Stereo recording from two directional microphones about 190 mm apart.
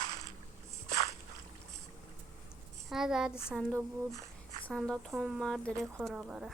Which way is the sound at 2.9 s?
5° right (ahead or behind).